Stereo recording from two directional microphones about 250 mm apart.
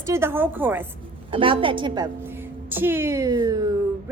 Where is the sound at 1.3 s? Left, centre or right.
Right.